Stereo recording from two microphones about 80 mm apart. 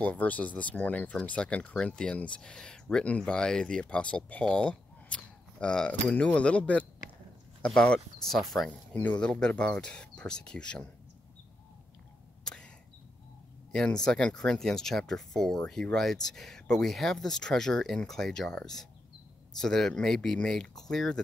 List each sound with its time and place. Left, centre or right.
0.0 s speech: centre
8.9 s speech: centre
12.4 s a sound: centre
13.7 s speech: centre